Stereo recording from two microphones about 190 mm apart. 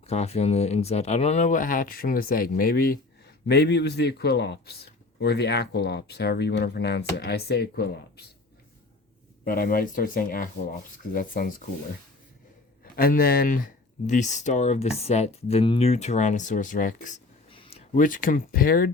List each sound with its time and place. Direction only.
0.1 s speech: 35° left (ahead or behind); by 2.9 s 50° left (ahead or behind)
3.4 s speech: 60° left (ahead or behind)
9.4 s speech: 50° left (ahead or behind)
12.8 s speech: 50° left (ahead or behind)
17.5 s speech: 30° left (ahead or behind); by 18.9 s 50° left (ahead or behind)